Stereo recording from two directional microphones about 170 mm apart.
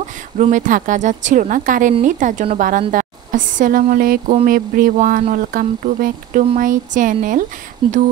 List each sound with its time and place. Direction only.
0.4 s speech: 50° right (ahead or behind)
7.8 s speech: 30° right (ahead or behind)